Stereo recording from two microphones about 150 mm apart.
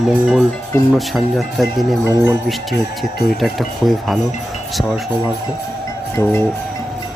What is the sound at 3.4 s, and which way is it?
Speech, centre (ahead or behind).